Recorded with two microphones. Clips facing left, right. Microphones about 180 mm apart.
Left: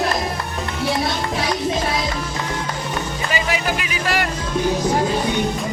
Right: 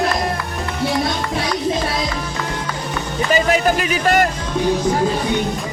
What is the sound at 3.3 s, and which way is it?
Speech, 40° right (ahead or behind).